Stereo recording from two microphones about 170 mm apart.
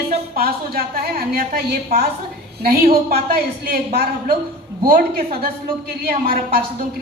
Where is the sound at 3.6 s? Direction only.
60° right (ahead or behind).